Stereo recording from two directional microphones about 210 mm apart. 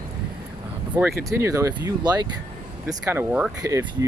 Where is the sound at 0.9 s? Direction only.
15° right (ahead or behind).